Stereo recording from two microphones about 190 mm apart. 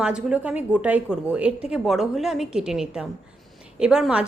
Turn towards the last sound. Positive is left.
turn(degrees=-5)  # may be behind; listen again after turning